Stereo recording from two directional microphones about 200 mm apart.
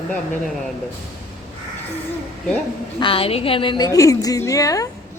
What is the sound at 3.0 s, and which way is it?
A woman's voice, 25° left (ahead or behind).